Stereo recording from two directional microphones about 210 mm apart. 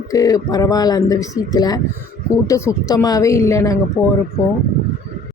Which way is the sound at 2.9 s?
15° left (ahead or behind).